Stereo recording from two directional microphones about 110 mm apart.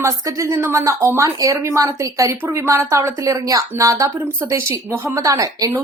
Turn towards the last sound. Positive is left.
turn(degrees=-30)  # may be behind; listen again after turning